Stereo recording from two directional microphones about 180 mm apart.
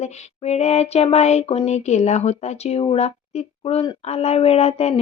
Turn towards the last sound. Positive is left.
turn(degrees=35)  # may be behind; listen again after turning